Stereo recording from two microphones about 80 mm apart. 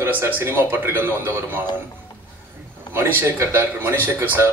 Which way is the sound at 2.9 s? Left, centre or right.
Right.